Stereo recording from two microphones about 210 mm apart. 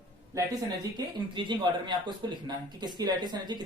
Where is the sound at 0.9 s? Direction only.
20° right (ahead or behind).